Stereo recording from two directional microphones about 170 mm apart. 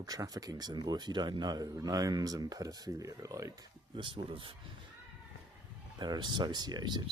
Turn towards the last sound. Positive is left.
turn(degrees=-25)  # may be behind; listen again after turning